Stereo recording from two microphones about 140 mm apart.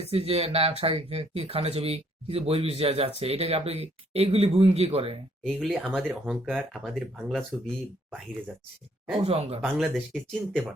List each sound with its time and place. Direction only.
0.0 s speech: 45° right (ahead or behind)
5.4 s speech: centre (ahead or behind)
9.2 s speech: 45° right (ahead or behind)
9.7 s speech: centre (ahead or behind)